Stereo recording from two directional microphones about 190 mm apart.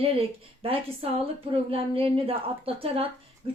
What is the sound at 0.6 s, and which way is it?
A woman's voice, 30° right (ahead or behind).